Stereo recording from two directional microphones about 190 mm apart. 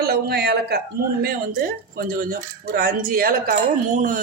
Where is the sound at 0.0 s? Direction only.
55° right (ahead or behind).